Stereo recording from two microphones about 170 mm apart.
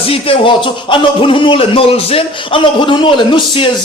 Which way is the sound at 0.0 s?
35° left (ahead or behind).